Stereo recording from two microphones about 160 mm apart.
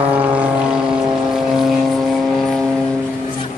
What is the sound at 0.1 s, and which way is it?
Vehicle, 10° right (ahead or behind).